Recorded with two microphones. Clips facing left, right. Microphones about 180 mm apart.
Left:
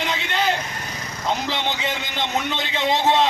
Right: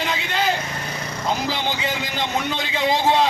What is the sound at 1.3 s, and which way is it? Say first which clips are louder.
Speech: even; 5° right (ahead or behind).